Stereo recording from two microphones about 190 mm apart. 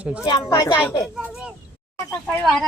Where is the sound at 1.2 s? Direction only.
5° right (ahead or behind).